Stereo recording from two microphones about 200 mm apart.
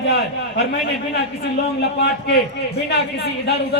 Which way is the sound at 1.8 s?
55° left (ahead or behind).